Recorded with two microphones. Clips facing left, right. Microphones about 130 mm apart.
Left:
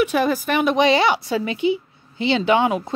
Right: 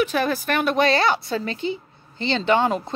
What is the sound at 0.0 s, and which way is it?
A woman's voice, 10° left (ahead or behind).